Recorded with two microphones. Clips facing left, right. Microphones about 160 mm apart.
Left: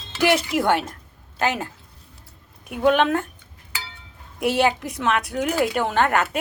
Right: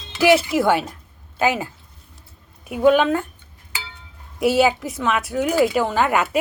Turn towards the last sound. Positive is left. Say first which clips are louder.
# right 1 dB
turn(degrees=-5)  # may be behind; listen again after turning